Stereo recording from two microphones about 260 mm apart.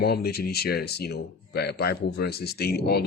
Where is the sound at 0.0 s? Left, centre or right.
Left.